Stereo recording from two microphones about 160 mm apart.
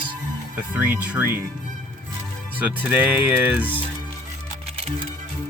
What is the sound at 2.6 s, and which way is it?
Speech, 10° right (ahead or behind).